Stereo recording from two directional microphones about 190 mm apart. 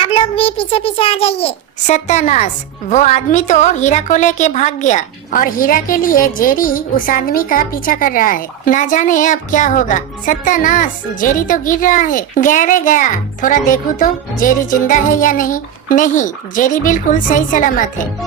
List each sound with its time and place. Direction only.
0.0 s a child's voice: 30° left (ahead or behind)